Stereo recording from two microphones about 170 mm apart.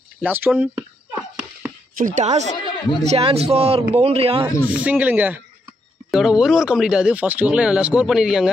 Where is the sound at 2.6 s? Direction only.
30° left (ahead or behind).